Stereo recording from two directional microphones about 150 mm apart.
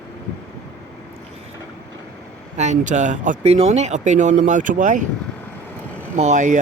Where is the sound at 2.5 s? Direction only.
50° right (ahead or behind).